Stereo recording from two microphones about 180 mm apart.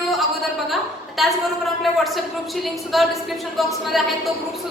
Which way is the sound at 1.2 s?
Centre (ahead or behind).